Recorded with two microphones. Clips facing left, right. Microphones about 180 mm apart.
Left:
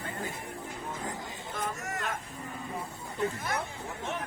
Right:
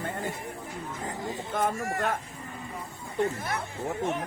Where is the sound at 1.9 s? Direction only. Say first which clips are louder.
Right 6 dB; 55° right (ahead or behind).